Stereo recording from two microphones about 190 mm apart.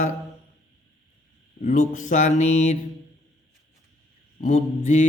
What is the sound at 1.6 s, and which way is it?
A man's voice, 40° left (ahead or behind).